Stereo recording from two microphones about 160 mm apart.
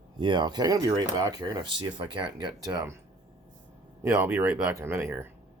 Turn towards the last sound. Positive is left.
turn(degrees=-15)  # may be behind; listen again after turning